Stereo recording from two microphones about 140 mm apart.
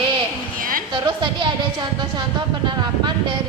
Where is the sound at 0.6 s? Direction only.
85° right.